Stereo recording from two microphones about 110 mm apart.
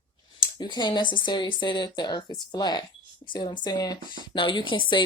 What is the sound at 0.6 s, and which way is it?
Speech, 40° left (ahead or behind).